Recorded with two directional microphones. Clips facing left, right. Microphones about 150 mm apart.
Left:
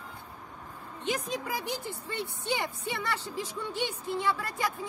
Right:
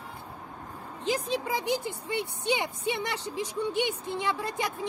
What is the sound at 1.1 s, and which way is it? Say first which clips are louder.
A woman's voice: right 4 dB; 30° right (ahead or behind).